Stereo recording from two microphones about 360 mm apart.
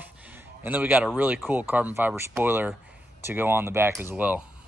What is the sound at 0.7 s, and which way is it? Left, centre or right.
Speech, centre.